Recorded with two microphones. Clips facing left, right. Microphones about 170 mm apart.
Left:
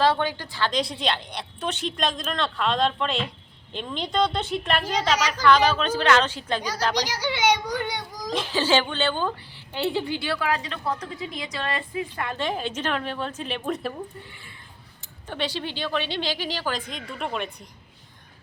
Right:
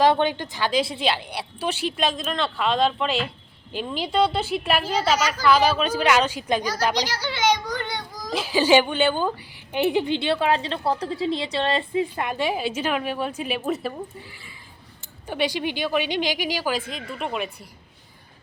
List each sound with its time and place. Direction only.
0.0 s a woman's voice: 20° right (ahead or behind)
0.7 s a woman's voice: 5° right (ahead or behind)
7.0 s children playing: 15° left (ahead or behind)
8.3 s a woman's voice: 10° right (ahead or behind); by 12.3 s 25° right (ahead or behind)
12.3 s a woman's voice: 10° right (ahead or behind)
15.3 s a woman's voice: 10° right (ahead or behind)